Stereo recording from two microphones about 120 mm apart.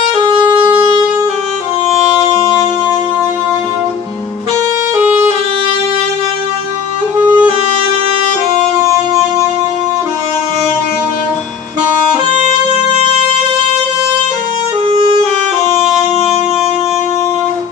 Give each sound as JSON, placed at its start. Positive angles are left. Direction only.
{"t": 0.2, "sound": "music", "side_deg": -40}
{"t": 0.5, "sound": "wind instrument", "side_deg": -50}
{"t": 4.9, "sound": "music", "side_deg": -15}
{"t": 7.2, "sound": "music", "side_deg": -15}
{"t": 14.8, "sound": "music", "side_deg": -55}